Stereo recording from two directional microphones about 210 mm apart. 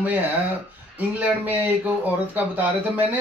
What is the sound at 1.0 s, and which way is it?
Speech, 10° right (ahead or behind).